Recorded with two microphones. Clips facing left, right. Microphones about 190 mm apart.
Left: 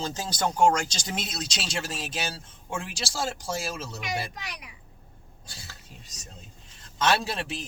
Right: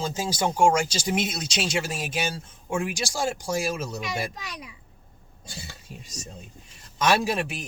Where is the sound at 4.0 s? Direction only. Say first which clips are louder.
Right 2 dB; 25° right (ahead or behind).